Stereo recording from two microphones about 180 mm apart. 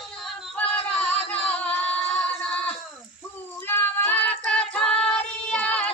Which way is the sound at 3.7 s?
15° left (ahead or behind).